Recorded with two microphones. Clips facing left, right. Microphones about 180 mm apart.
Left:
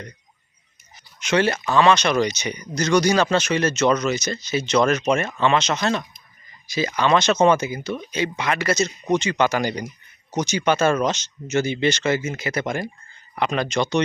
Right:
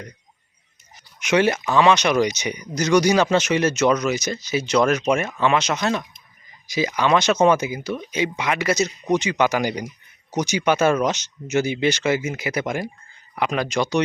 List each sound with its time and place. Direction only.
1.2 s speech: 15° right (ahead or behind)